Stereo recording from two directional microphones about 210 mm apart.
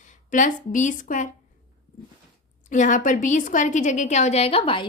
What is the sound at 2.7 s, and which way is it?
Speech, 35° left (ahead or behind).